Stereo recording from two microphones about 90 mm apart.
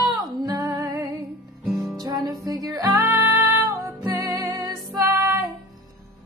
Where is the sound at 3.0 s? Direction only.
25° right (ahead or behind).